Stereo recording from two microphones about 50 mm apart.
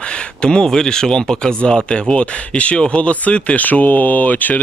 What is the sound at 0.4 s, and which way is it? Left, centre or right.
Speech, centre.